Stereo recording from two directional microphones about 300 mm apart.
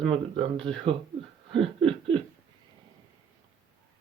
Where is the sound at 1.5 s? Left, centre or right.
Centre.